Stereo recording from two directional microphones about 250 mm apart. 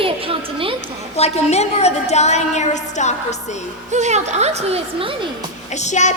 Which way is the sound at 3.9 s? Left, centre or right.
Right.